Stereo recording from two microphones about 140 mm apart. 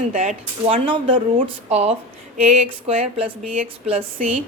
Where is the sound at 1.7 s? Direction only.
50° right (ahead or behind).